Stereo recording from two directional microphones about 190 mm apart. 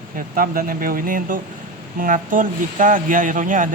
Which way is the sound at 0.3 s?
50° right (ahead or behind).